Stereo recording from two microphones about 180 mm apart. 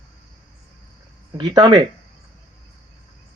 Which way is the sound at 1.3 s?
20° right (ahead or behind).